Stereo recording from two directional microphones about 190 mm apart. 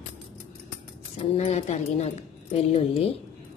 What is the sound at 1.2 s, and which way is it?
Speech, 30° left (ahead or behind).